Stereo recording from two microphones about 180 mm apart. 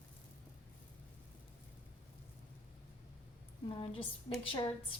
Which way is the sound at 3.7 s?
30° left (ahead or behind).